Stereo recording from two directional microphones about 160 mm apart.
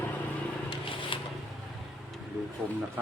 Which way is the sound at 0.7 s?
30° left (ahead or behind).